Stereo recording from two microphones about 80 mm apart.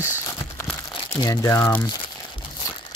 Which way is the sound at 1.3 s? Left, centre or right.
Left.